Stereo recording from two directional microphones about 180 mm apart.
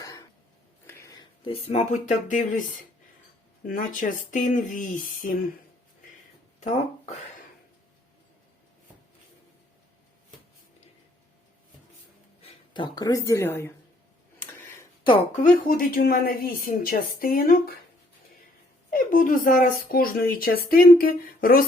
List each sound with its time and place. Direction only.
0.0 s a sound: 20° left (ahead or behind)
1.5 s speech: 35° left (ahead or behind)
3.7 s speech: 50° left (ahead or behind)
6.6 s speech: 40° left (ahead or behind)
12.4 s speech: 30° left (ahead or behind); by 13.7 s 15° left (ahead or behind)
15.7 s speech: 50° left (ahead or behind)
18.9 s speech: 50° left (ahead or behind)